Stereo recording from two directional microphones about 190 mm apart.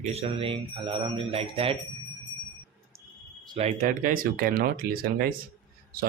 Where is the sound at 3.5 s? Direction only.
40° right (ahead or behind).